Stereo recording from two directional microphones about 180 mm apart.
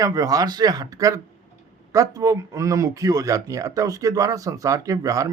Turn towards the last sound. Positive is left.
turn(degrees=-20)  # may be behind; listen again after turning